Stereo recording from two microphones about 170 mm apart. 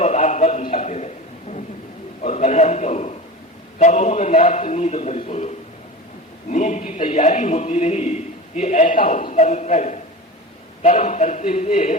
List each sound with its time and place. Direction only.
0.0 s a sound: 45° left (ahead or behind)
2.2 s a man's voice: 40° left (ahead or behind)
6.5 s a man's voice: 45° left (ahead or behind)